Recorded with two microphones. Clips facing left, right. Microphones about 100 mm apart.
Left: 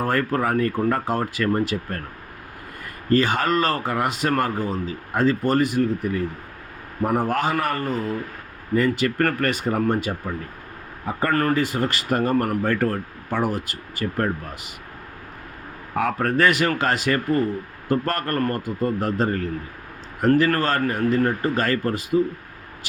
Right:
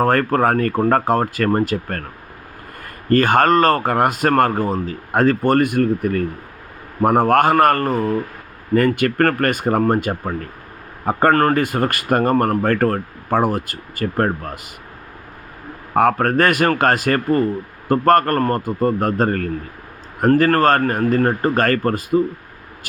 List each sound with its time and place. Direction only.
0.0 s speech: 50° right (ahead or behind)
3.1 s a man's voice: 50° right (ahead or behind)
16.0 s speech: 50° right (ahead or behind)